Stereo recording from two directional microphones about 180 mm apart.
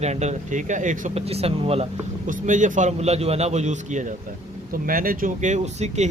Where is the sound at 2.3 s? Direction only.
45° right (ahead or behind).